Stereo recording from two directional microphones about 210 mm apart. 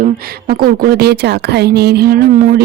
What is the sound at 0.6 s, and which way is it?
Speech, 45° right (ahead or behind).